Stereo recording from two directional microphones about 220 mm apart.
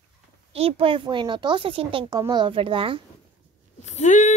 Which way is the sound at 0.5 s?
25° right (ahead or behind).